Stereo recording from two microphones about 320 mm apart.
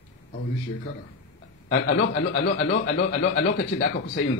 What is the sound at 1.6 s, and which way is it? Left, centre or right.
Speech, left.